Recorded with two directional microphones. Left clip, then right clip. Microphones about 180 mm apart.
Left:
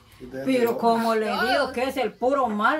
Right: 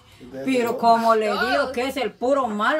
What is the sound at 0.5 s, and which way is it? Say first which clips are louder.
Speech: right 3 dB; 40° right (ahead or behind).